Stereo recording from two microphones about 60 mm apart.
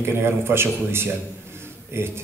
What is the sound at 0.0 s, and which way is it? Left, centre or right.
A man's voice, right.